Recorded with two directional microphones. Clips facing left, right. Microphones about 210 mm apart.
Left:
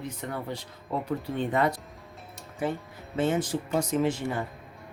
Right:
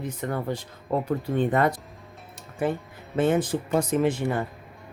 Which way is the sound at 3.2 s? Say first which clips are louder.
Right 4 dB; 55° right (ahead or behind).